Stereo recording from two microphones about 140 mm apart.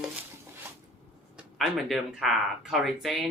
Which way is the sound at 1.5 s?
Centre (ahead or behind).